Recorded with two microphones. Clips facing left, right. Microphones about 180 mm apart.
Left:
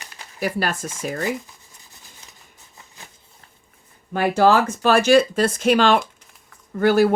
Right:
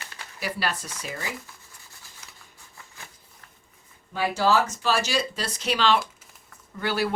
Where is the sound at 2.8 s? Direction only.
20° left (ahead or behind).